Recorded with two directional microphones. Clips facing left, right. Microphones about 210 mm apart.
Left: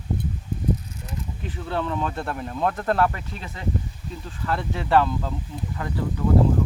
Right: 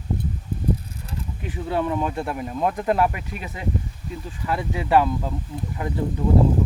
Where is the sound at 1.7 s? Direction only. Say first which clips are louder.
Right 3 dB; 10° right (ahead or behind).